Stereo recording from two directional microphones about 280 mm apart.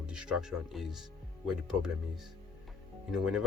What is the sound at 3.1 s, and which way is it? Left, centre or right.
Speech, centre.